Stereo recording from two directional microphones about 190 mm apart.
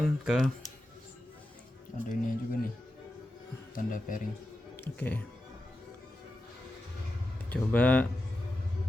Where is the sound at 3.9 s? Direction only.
45° left (ahead or behind).